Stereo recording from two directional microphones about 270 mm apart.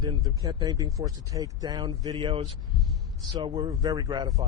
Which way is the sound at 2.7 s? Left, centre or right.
Centre.